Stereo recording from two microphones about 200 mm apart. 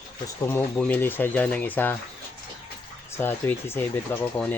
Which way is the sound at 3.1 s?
10° left (ahead or behind).